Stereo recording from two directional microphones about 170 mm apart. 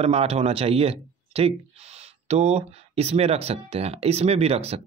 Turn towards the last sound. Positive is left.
turn(degrees=-35)  # may be behind; listen again after turning